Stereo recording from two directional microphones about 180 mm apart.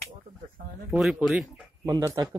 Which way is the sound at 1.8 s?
20° right (ahead or behind).